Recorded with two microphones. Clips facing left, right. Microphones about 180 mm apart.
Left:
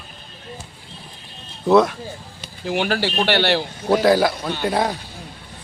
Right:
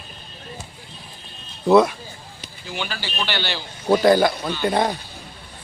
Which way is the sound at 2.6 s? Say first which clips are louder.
Left 10 dB; 65° left (ahead or behind).